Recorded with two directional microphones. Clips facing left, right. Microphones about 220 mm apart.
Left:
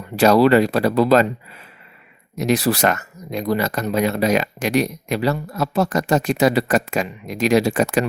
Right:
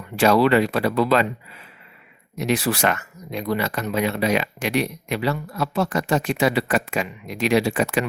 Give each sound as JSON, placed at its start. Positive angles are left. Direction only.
{"t": 0.2, "sound": "speech", "side_deg": 40}
{"t": 2.3, "sound": "speech", "side_deg": 40}